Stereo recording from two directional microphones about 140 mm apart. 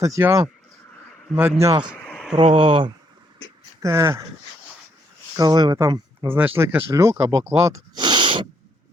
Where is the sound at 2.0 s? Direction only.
5° left (ahead or behind).